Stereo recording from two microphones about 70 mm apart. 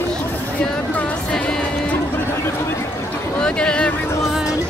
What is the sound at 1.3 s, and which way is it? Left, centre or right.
Music, centre.